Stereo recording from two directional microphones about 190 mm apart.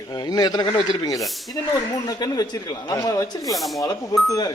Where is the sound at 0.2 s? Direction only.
20° left (ahead or behind).